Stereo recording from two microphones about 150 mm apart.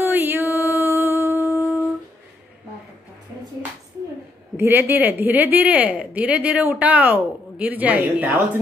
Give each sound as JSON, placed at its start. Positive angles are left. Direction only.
{"t": 0.0, "sound": "music", "side_deg": -15}
{"t": 4.6, "sound": "a woman's voice", "side_deg": -15}